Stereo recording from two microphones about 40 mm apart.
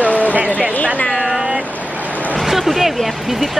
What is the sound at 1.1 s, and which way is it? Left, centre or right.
Speech, centre.